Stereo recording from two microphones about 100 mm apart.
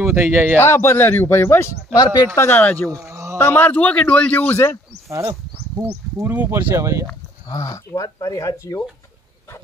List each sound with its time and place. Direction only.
0.0 s speech: 25° right (ahead or behind)
0.6 s a man's voice: 25° left (ahead or behind)
2.0 s speech: 45° left (ahead or behind)
2.3 s a man's voice: 20° left (ahead or behind)
2.9 s a sound: 30° right (ahead or behind)
3.3 s a man's voice: 20° left (ahead or behind)
5.1 s speech: 25° right (ahead or behind)
7.4 s speech: 35° left (ahead or behind)